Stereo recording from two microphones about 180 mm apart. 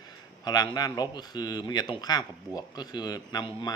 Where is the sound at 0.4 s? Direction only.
25° left (ahead or behind).